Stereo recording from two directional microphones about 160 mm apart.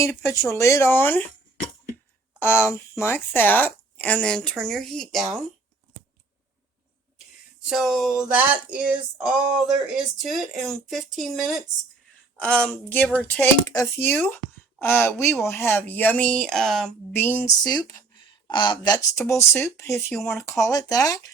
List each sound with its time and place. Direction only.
0.0 s speech: 15° left (ahead or behind)
2.4 s speech: 15° left (ahead or behind)
7.7 s a sound: centre (ahead or behind)
12.4 s a woman's voice: 5° left (ahead or behind)
17.1 s speech: 15° left (ahead or behind)
17.7 s speech: 25° left (ahead or behind)